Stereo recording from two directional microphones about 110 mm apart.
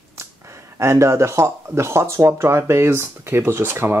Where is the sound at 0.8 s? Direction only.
25° right (ahead or behind).